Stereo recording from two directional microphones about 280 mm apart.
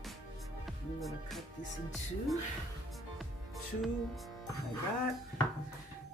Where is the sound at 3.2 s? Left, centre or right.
Centre.